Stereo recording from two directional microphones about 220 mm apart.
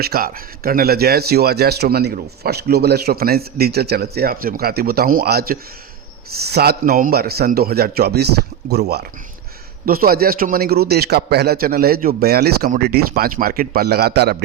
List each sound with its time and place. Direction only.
0.0 s speech: 40° right (ahead or behind)